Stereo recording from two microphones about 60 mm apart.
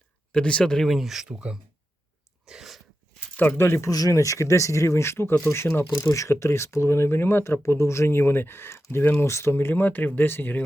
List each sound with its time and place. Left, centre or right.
0.3 s speech: centre
0.9 s speech: centre
2.5 s sneeze: centre
3.6 s speech: left
3.8 s speech: left